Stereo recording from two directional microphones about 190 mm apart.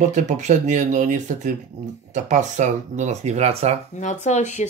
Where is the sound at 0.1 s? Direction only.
40° right (ahead or behind).